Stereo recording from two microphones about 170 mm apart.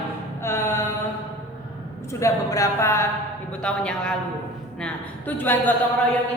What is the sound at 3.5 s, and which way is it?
A man's voice, 5° left (ahead or behind).